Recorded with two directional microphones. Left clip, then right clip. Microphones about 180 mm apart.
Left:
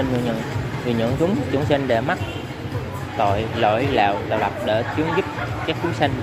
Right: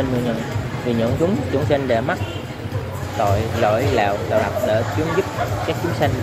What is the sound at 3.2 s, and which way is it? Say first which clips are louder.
Speech: even; 25° left (ahead or behind).